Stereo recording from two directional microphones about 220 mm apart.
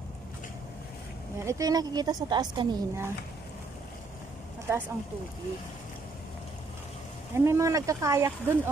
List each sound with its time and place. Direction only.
1.4 s speech: 15° right (ahead or behind)
4.6 s speech: 10° right (ahead or behind)
7.3 s speech: 10° right (ahead or behind)